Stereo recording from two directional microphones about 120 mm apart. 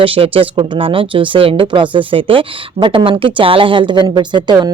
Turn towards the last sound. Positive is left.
turn(degrees=-35)  # may be behind; listen again after turning